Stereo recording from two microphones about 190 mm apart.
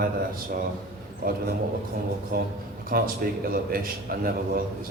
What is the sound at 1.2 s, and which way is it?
Speech, 45° right (ahead or behind).